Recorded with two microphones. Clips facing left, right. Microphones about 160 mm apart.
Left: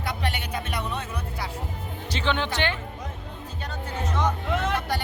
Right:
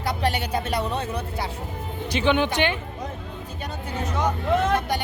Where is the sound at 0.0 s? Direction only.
35° right (ahead or behind).